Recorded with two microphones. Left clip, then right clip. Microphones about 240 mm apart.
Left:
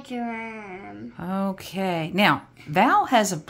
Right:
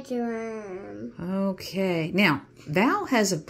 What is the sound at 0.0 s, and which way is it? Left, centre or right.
Speech, centre.